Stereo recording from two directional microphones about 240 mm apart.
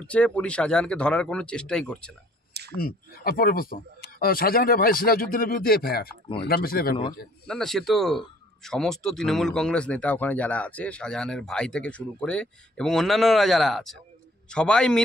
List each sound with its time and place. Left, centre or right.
0.0 s speech: centre
2.8 s speech: left
7.4 s speech: centre